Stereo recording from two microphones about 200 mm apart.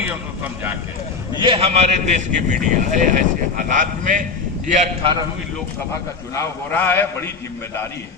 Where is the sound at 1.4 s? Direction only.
25° right (ahead or behind).